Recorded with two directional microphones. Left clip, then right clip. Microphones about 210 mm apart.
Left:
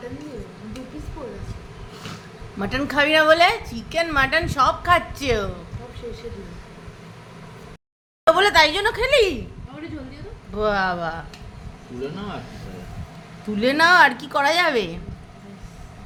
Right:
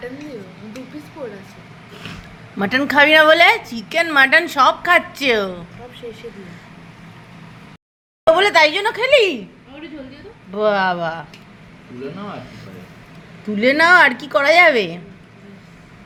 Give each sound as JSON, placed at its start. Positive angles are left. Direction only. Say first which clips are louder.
{"t": 2.6, "sound": "a woman's voice", "louder": "right 7 dB", "side_deg": -25}
{"t": 8.2, "sound": "speech", "louder": "right 3 dB", "side_deg": -5}
{"t": 10.5, "sound": "speech", "louder": "right 5 dB", "side_deg": -5}
{"t": 13.6, "sound": "a woman's voice", "louder": "right 3 dB", "side_deg": -5}